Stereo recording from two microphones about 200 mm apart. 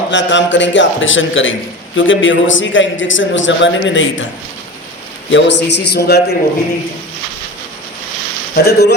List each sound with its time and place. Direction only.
0.1 s a man's voice: 65° left (ahead or behind)
5.3 s a man's voice: 60° left (ahead or behind)
8.5 s a man's voice: 55° left (ahead or behind)